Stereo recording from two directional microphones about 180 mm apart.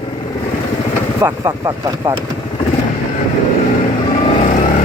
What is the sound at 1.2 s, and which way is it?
Speech, 15° right (ahead or behind).